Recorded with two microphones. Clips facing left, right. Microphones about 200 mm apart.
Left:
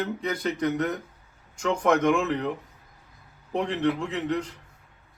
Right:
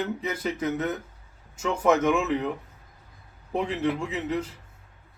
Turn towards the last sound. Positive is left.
turn(degrees=-5)  # may be behind; listen again after turning